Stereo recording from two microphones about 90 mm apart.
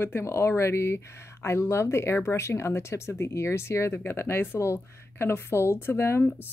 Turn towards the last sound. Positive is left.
turn(degrees=25)  # may be behind; listen again after turning